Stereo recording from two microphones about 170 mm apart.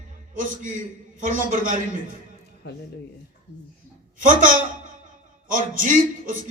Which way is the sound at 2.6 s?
90° left.